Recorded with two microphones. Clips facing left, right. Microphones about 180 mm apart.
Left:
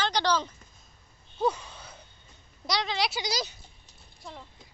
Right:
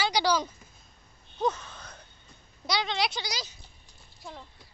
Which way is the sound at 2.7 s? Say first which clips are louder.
Even; centre (ahead or behind).